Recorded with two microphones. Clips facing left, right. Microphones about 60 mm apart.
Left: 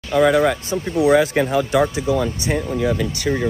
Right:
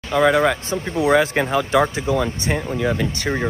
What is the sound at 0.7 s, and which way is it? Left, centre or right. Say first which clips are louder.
Speech: left 2 dB; right.